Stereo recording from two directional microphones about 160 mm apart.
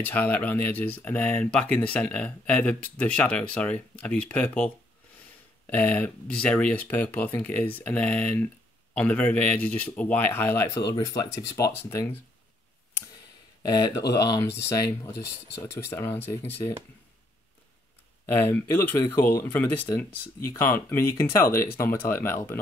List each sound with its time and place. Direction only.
0.0 s speech: 10° left (ahead or behind)
5.7 s speech: 10° left (ahead or behind)
13.6 s speech: 25° left (ahead or behind)
18.2 s speech: 15° left (ahead or behind)